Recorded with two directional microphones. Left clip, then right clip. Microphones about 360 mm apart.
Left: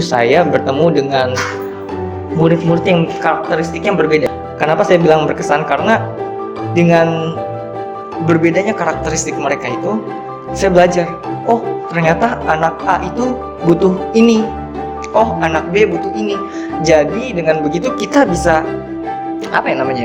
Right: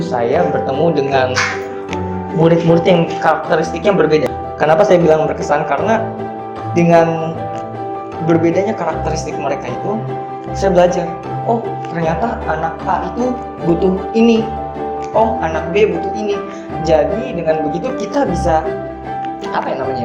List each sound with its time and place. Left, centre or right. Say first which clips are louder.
0.1 s speech: left 4 dB; left
2.4 s speech: right 2 dB; centre
8.3 s speech: left 1 dB; centre
10.6 s speech: left 2 dB; left